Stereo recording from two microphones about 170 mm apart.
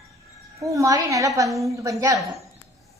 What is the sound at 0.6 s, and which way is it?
Speech, 20° right (ahead or behind).